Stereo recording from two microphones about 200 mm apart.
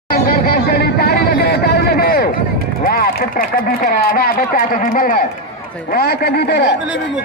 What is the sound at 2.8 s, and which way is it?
Speech, 45° left (ahead or behind).